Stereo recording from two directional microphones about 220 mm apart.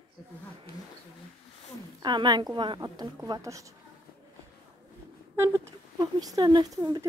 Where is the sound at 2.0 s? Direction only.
20° right (ahead or behind).